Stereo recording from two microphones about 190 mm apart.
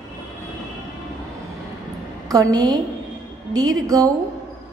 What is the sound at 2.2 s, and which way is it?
A woman's voice, 20° right (ahead or behind).